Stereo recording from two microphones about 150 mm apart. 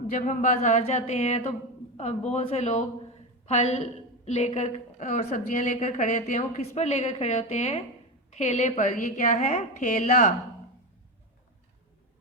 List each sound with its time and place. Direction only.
0.1 s a woman's voice: 55° left (ahead or behind)